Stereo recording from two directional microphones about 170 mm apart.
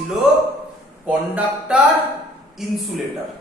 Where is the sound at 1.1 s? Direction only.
5° right (ahead or behind).